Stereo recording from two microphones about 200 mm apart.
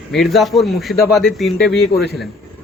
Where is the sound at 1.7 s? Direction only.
50° left (ahead or behind).